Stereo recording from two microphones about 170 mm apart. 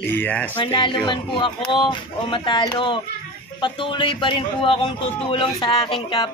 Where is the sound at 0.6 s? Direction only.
30° left (ahead or behind).